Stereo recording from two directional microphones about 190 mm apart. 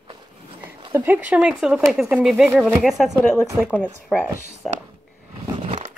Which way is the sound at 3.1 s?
10° left (ahead or behind).